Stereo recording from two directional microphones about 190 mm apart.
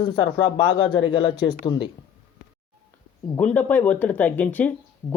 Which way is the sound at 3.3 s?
10° left (ahead or behind).